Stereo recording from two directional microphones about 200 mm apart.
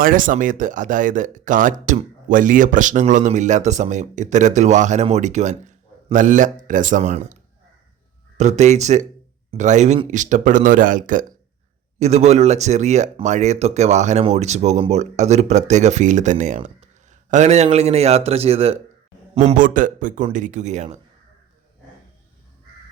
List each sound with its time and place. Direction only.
0.0 s speech: 45° right (ahead or behind)
8.4 s speech: 35° right (ahead or behind)